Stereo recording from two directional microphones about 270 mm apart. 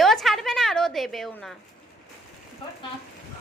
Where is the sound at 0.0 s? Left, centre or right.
Centre.